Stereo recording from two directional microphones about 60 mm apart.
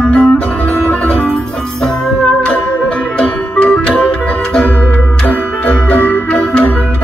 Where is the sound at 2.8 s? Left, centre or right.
Centre.